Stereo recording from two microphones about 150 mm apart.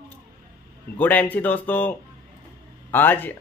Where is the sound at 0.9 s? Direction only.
10° left (ahead or behind).